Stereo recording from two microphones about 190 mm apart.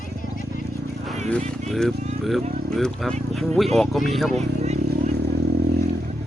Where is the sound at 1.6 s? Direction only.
Centre (ahead or behind).